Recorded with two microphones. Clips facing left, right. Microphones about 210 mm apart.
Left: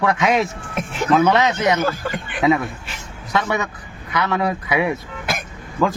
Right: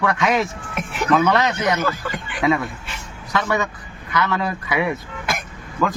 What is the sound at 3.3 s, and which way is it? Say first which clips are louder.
A man's voice: even; 20° left (ahead or behind).